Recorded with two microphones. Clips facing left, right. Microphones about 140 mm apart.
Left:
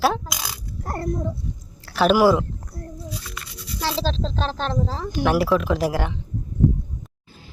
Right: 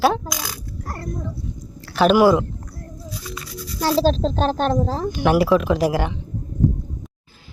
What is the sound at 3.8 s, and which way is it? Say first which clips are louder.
A woman's voice: right 7 dB; 45° right (ahead or behind).